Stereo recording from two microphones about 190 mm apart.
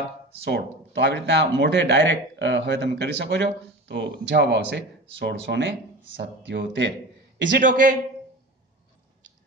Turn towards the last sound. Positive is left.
turn(degrees=-45)  # may be behind; listen again after turning